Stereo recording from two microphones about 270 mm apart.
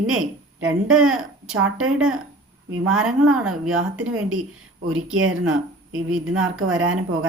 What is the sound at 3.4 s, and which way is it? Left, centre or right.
Speech, right.